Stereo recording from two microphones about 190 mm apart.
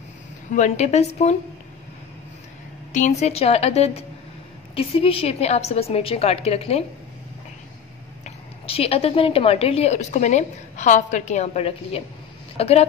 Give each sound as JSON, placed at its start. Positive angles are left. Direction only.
{"t": 0.5, "sound": "a woman's voice", "side_deg": 40}
{"t": 2.9, "sound": "a woman's voice", "side_deg": 40}
{"t": 8.6, "sound": "a woman's voice", "side_deg": 30}